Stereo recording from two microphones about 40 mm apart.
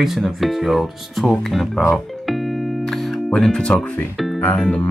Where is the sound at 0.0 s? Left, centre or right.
Centre.